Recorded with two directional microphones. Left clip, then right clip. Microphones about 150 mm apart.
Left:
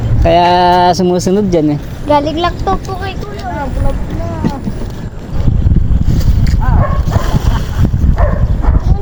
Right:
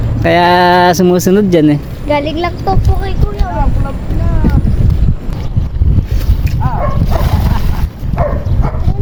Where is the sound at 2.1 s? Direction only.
40° left (ahead or behind).